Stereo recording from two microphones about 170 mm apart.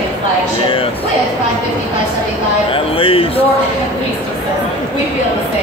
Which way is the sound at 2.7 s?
30° left (ahead or behind).